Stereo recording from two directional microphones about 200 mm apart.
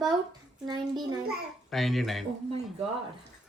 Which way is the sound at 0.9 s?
Centre (ahead or behind).